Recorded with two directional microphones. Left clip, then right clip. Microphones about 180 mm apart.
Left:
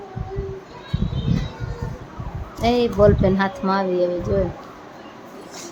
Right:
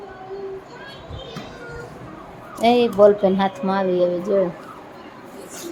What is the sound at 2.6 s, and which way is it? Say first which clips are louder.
A woman's voice: right 3 dB; 5° right (ahead or behind).